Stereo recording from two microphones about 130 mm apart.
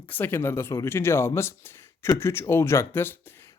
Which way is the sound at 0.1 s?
15° left (ahead or behind).